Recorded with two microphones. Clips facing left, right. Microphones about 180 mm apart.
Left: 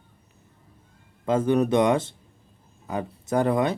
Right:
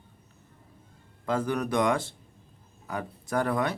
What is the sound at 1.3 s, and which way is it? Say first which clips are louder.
Speech: left 7 dB; 25° left (ahead or behind).